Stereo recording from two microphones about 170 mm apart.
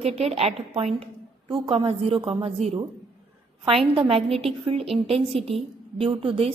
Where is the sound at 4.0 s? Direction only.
35° right (ahead or behind).